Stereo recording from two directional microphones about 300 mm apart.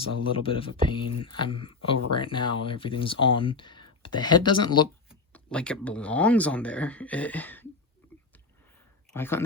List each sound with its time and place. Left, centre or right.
0.1 s speech: centre
5.0 s speech: centre
9.1 s speech: centre